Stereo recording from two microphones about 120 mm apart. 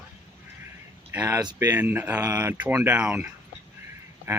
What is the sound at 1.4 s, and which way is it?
Speech, 30° right (ahead or behind).